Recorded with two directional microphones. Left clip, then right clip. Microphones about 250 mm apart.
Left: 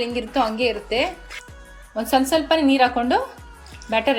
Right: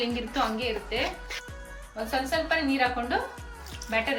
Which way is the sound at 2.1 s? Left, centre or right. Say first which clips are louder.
Left 9 dB; left.